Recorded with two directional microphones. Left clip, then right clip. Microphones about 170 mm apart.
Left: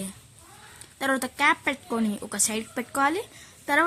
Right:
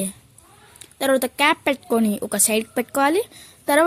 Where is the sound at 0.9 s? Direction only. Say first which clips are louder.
Right 7 dB; 20° right (ahead or behind).